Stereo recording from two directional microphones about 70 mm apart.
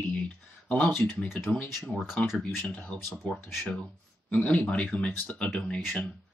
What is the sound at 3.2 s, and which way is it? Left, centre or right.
Speech, centre.